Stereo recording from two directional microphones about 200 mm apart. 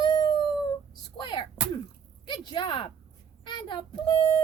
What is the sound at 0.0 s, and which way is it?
Dog, 20° left (ahead or behind).